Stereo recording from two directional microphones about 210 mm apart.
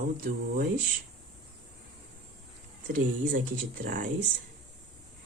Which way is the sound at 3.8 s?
40° right (ahead or behind).